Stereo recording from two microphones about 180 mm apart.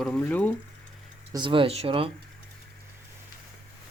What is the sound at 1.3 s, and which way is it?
Speech, 25° right (ahead or behind).